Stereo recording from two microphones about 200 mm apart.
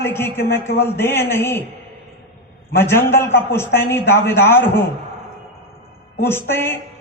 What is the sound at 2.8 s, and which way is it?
A man's voice, 10° left (ahead or behind).